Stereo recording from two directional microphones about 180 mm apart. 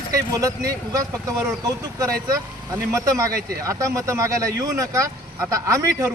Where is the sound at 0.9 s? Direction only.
15° right (ahead or behind).